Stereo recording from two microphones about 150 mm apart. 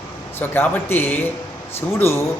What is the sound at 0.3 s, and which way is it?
A man's voice, 15° left (ahead or behind).